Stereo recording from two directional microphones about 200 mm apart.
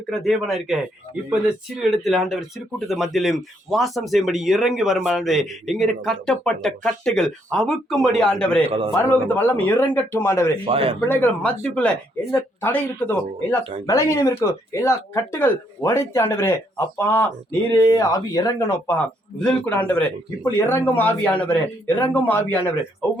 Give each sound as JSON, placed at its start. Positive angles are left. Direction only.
{"t": 0.1, "sound": "speech", "side_deg": 0}
{"t": 8.6, "sound": "speech", "side_deg": -30}
{"t": 9.0, "sound": "speech", "side_deg": 10}
{"t": 10.7, "sound": "speech", "side_deg": -30}
{"t": 12.3, "sound": "speech", "side_deg": 10}